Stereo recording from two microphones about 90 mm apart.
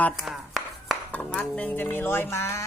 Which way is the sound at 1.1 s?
15° left (ahead or behind).